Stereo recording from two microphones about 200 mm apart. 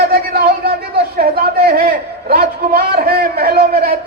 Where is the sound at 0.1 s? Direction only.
50° right (ahead or behind).